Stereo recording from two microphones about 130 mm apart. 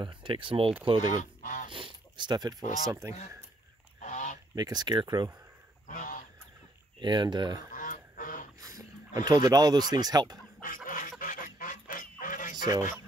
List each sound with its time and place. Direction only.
0.0 s speech: 40° right (ahead or behind)
1.4 s a sound: 75° left (ahead or behind)
1.7 s speech: 40° right (ahead or behind); by 3.2 s 25° right (ahead or behind)
4.0 s goose: 70° left (ahead or behind)
4.6 s speech: 30° right (ahead or behind)
5.9 s goose: 90° left
7.0 s speech: 35° right (ahead or behind)
7.7 s goose: 90° left
8.5 s speech: 25° right (ahead or behind)
10.6 s fowl: 90° left